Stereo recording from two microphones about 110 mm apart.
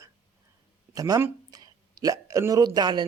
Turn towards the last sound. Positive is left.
turn(degrees=-40)  # may be behind; listen again after turning